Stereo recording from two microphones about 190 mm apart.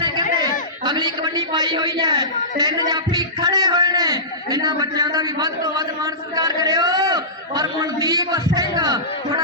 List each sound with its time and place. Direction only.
0.9 s a man's voice: 20° right (ahead or behind)